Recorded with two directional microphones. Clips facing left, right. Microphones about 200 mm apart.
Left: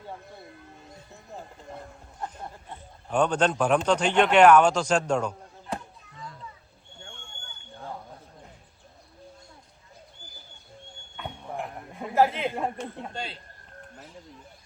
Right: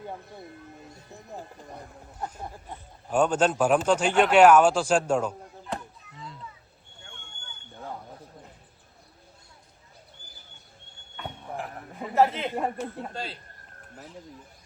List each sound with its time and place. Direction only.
1.1 s speech: 15° right (ahead or behind)
2.2 s speech: 5° right (ahead or behind)
11.2 s a sound: centre (ahead or behind)